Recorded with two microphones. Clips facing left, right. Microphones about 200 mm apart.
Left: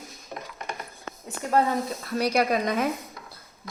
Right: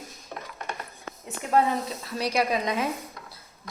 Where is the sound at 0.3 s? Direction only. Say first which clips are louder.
Left 1 dB; 10° left (ahead or behind).